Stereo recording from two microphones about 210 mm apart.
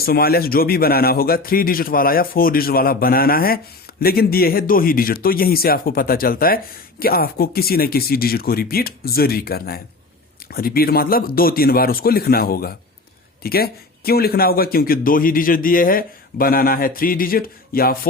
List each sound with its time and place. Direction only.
0.0 s speech: 45° left (ahead or behind)